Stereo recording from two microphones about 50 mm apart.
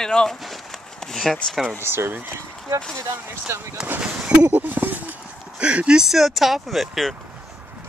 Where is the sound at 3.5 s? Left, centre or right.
Right.